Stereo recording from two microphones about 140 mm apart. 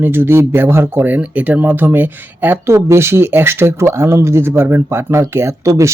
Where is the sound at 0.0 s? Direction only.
15° right (ahead or behind).